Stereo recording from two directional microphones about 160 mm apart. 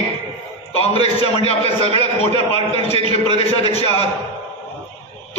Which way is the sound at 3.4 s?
40° left (ahead or behind).